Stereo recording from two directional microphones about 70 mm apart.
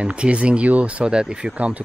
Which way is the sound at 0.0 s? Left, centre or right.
Centre.